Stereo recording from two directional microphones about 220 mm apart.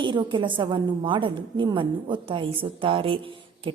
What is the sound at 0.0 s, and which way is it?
A woman's voice, 20° right (ahead or behind).